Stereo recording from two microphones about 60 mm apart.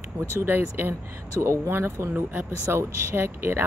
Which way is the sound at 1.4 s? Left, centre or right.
Right.